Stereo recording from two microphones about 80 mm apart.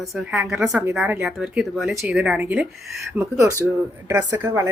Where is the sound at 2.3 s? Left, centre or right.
Right.